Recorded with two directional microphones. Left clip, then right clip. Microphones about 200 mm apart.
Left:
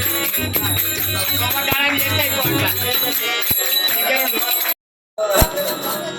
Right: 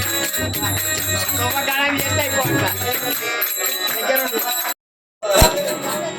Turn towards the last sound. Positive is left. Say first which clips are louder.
# right 2 dB
turn(degrees=0)  # may be behind; listen again after turning